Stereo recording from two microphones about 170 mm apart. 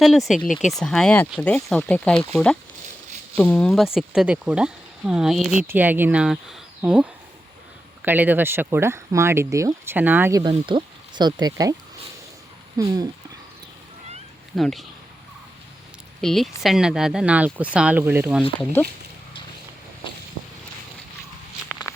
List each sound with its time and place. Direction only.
0.0 s speech: centre (ahead or behind)
10.7 s speech: 25° right (ahead or behind)
12.8 s speech: 20° right (ahead or behind)
14.5 s speech: centre (ahead or behind)
16.2 s speech: centre (ahead or behind)
18.6 s speech: 10° left (ahead or behind)